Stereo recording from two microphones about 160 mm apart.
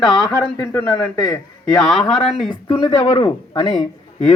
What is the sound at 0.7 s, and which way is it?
Speech, 20° left (ahead or behind).